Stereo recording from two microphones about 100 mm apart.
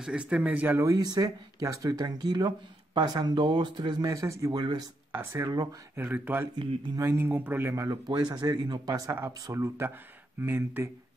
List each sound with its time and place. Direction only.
0.0 s speech: 10° right (ahead or behind)
0.7 s speech: 35° right (ahead or behind)
4.1 s speech: 30° right (ahead or behind)
4.5 s speech: 45° right (ahead or behind)
5.9 s speech: 20° right (ahead or behind)
7.7 s speech: 35° right (ahead or behind)